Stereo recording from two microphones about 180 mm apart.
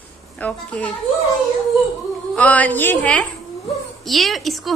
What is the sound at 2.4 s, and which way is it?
A woman's voice, 10° left (ahead or behind).